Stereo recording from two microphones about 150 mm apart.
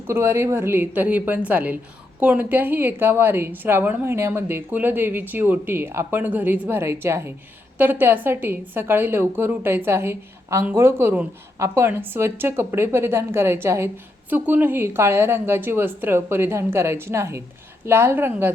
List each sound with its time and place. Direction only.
0.1 s a woman's voice: 20° right (ahead or behind)